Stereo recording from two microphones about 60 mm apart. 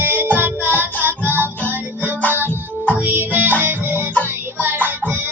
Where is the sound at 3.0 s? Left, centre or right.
Right.